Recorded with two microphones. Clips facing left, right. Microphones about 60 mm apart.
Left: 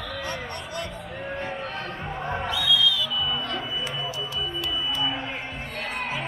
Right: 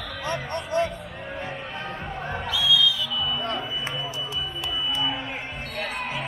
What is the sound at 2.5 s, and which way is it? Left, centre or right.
Music, left.